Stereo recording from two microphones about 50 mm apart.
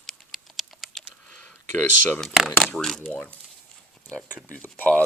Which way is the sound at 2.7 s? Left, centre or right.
Centre.